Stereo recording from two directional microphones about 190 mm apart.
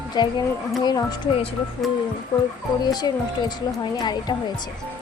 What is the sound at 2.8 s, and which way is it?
Speech, 20° left (ahead or behind).